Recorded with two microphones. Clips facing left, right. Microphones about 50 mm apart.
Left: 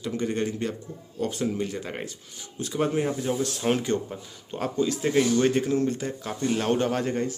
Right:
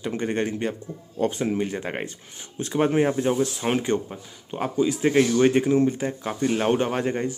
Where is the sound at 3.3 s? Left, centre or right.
Centre.